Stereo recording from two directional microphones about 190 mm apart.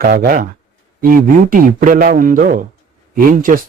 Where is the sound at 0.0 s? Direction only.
50° right (ahead or behind).